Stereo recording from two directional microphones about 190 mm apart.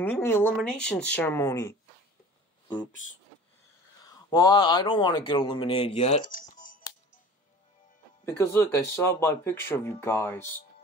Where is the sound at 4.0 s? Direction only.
20° left (ahead or behind).